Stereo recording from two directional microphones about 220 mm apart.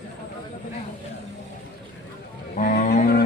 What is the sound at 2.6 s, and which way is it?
Cattle, 35° left (ahead or behind).